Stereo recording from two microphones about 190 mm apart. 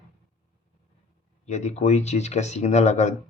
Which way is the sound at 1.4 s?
35° left (ahead or behind).